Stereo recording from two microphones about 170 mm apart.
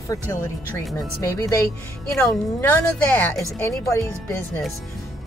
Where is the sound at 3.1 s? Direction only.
10° left (ahead or behind).